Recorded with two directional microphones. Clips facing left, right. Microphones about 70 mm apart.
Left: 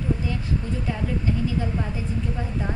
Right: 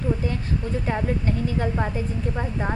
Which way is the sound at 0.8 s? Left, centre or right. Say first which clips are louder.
Right 3 dB; right.